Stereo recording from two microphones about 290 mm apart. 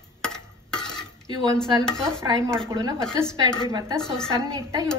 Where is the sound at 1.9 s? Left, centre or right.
Centre.